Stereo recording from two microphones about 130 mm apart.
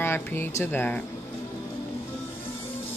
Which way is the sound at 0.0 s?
15° left (ahead or behind).